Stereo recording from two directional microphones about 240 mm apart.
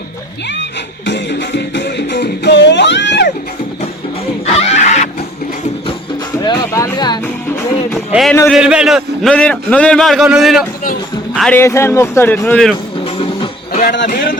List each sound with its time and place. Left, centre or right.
1.0 s music: left
4.4 s a sound: left
6.4 s music: centre
8.1 s a man's voice: centre
13.1 s a sound: left
13.8 s speech: left
14.1 s speech: left